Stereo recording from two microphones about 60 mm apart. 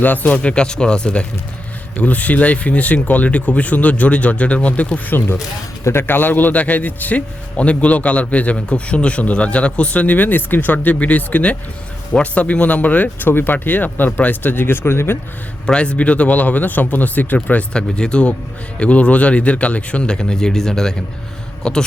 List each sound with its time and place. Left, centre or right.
0.0 s speech: left
0.4 s speech: centre; by 5.4 s left
5.8 s speech: left
15.6 s speech: centre
17.7 s speech: centre